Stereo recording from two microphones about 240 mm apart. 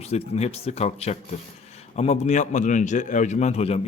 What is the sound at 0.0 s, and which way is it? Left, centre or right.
A man's voice, left.